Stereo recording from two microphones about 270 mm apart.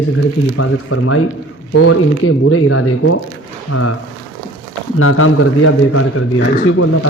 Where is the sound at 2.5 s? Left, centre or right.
Left.